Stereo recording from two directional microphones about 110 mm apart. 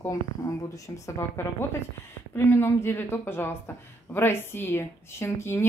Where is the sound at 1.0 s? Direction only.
25° left (ahead or behind).